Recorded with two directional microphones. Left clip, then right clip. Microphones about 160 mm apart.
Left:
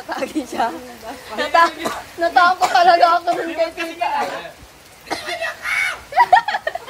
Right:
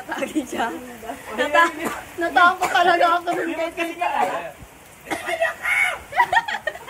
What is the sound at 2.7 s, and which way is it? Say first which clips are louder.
Speech: left 5 dB; 15° left (ahead or behind).